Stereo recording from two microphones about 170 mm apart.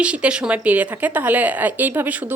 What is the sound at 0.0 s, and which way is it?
A woman's voice, 5° right (ahead or behind).